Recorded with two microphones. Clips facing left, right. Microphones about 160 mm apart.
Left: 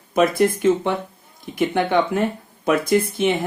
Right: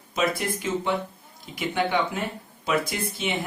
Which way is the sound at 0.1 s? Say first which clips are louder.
Left 9 dB; 55° left (ahead or behind).